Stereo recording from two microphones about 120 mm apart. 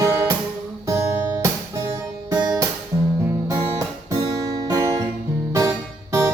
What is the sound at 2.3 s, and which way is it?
Guitar, 30° right (ahead or behind).